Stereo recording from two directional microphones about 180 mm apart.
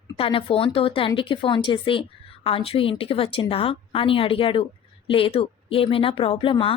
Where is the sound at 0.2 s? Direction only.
30° left (ahead or behind).